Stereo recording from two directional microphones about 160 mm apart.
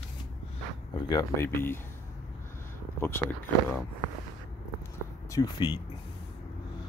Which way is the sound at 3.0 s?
15° left (ahead or behind).